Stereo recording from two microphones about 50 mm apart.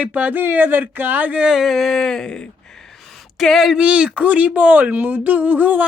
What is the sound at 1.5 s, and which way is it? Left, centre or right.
Speech, centre.